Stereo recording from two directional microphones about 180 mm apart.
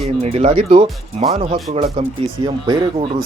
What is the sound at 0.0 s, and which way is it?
Speech, 35° right (ahead or behind).